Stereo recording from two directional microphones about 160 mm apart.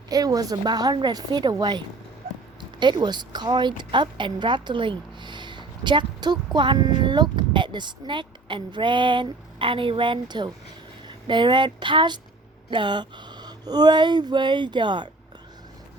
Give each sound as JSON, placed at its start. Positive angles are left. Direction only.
{"t": 0.1, "sound": "speech", "side_deg": -25}
{"t": 2.3, "sound": "a sound", "side_deg": -45}
{"t": 2.6, "sound": "speech", "side_deg": -30}